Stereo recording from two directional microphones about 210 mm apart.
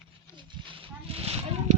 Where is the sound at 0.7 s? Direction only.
25° right (ahead or behind).